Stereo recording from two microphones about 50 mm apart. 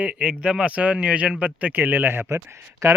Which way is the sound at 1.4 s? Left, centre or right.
Right.